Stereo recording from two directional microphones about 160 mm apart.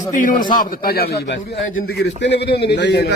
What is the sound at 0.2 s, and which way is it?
A man's voice, 60° left (ahead or behind).